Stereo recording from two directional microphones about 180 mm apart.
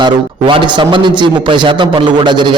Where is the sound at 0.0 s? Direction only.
25° right (ahead or behind).